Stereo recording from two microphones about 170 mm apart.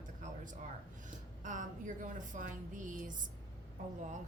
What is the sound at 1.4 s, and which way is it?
A woman's voice, 50° right (ahead or behind).